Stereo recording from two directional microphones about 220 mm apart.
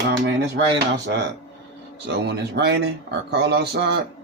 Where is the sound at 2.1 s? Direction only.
50° right (ahead or behind).